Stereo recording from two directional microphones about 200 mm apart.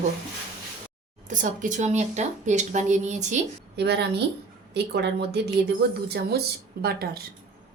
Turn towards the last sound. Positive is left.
turn(degrees=-50)  # may be behind; listen again after turning